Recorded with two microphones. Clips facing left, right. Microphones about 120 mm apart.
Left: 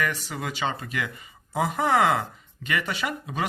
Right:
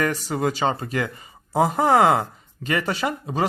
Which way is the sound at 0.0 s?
40° right (ahead or behind).